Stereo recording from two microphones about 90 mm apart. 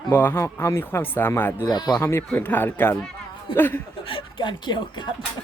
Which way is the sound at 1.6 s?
50° left (ahead or behind).